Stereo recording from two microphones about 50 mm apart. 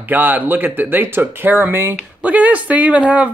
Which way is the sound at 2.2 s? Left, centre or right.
Right.